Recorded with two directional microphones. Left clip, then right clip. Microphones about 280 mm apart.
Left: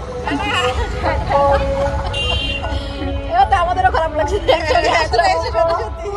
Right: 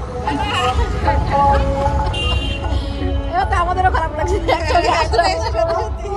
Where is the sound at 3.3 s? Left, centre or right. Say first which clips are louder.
Left 4 dB; centre.